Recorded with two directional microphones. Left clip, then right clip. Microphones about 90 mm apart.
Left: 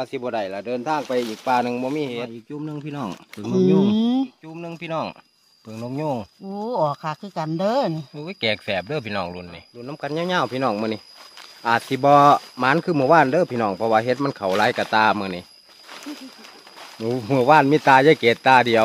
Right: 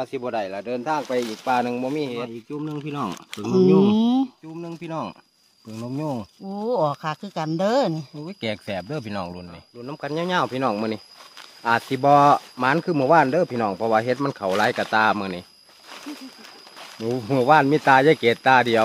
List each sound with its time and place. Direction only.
0.0 s speech: 10° left (ahead or behind); by 4.3 s 10° right (ahead or behind)
4.6 s speech: 15° left (ahead or behind)
6.6 s speech: 80° right; by 8.0 s 65° right (ahead or behind)
8.2 s speech: 10° left (ahead or behind)
17.1 s speech: 25° left (ahead or behind)